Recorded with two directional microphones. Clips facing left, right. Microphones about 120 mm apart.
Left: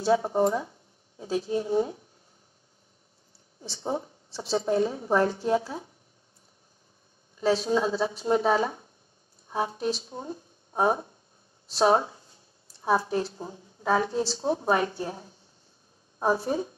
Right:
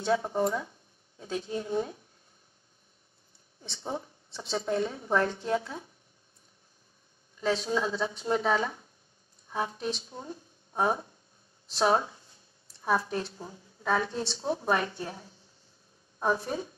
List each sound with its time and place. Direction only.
0.0 s speech: 25° left (ahead or behind)
3.6 s a woman's voice: 25° left (ahead or behind)
7.3 s a woman's voice: 30° left (ahead or behind)